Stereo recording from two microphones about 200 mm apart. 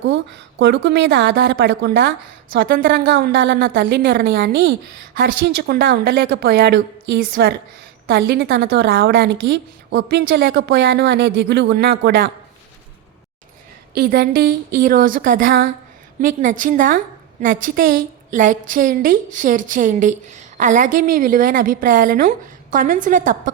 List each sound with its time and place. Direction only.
0.6 s a woman's voice: 60° right (ahead or behind)
13.9 s a woman's voice: 50° right (ahead or behind)